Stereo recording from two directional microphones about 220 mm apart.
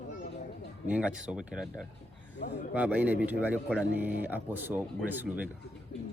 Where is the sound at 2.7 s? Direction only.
5° right (ahead or behind).